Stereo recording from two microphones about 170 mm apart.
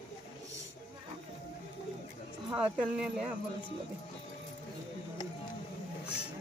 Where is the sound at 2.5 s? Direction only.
5° right (ahead or behind).